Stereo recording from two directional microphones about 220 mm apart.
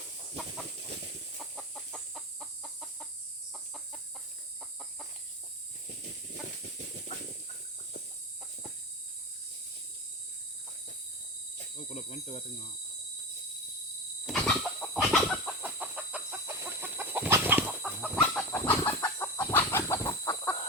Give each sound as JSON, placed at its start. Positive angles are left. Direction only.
{"t": 1.4, "sound": "chicken", "side_deg": 0}
{"t": 11.9, "sound": "cricket", "side_deg": 30}
{"t": 14.3, "sound": "chicken", "side_deg": 5}
{"t": 18.0, "sound": "chicken", "side_deg": 5}